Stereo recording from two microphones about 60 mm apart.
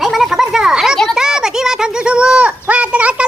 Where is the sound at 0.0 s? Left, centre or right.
Centre.